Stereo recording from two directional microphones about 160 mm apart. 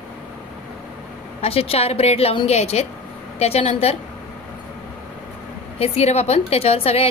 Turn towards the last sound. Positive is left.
turn(degrees=40)  # may be behind; listen again after turning